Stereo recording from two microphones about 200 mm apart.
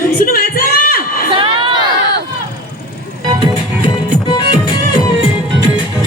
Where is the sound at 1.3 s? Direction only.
25° right (ahead or behind).